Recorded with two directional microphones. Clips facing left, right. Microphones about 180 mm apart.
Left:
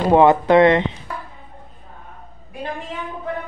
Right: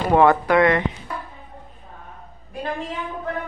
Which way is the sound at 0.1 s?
20° left (ahead or behind).